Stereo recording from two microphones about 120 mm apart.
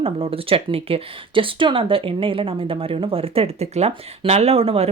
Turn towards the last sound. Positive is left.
turn(degrees=-55)  # may be behind; listen again after turning